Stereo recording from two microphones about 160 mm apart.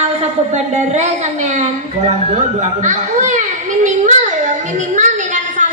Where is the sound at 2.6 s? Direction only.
50° right (ahead or behind).